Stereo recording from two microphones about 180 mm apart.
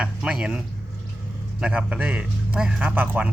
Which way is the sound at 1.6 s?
5° right (ahead or behind).